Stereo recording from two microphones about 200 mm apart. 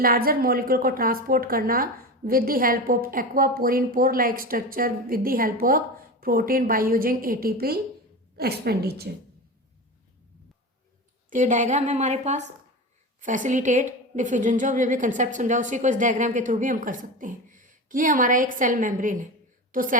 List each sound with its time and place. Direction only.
0.0 s a woman's voice: 45° right (ahead or behind)
11.3 s a woman's voice: 40° right (ahead or behind)